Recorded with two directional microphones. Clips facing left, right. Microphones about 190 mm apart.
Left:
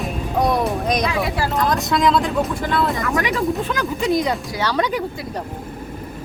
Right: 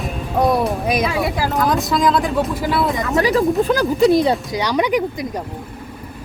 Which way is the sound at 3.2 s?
35° right (ahead or behind).